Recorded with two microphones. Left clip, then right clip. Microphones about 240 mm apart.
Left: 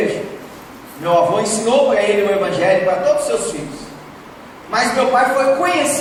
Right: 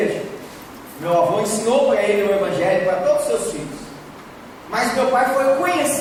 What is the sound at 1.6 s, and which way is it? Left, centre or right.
Speech, left.